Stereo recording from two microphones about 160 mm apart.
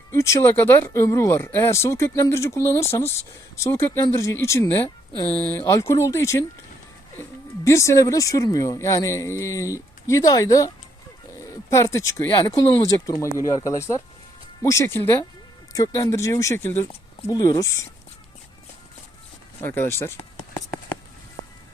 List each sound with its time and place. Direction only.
0.1 s speech: 15° left (ahead or behind)
7.6 s speech: 20° left (ahead or behind)
11.7 s speech: 20° left (ahead or behind)
19.6 s speech: 15° left (ahead or behind)